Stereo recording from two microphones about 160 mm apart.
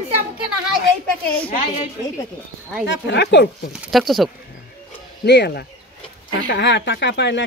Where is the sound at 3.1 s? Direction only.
90° left.